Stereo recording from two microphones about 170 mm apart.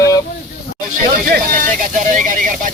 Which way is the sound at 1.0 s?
50° right (ahead or behind).